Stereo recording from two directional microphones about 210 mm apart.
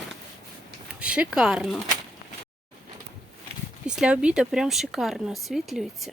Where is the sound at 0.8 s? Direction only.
5° right (ahead or behind).